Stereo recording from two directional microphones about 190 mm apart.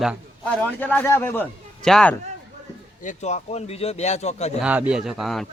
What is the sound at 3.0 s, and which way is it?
A man's voice, 40° left (ahead or behind).